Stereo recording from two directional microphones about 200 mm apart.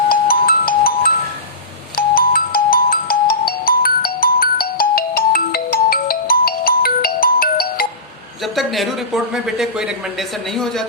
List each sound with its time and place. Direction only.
0.1 s music: 45° left (ahead or behind)
2.0 s ringtone: 45° left (ahead or behind)
8.5 s speech: centre (ahead or behind)